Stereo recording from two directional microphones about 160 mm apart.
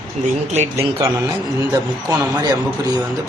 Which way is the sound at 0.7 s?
15° right (ahead or behind).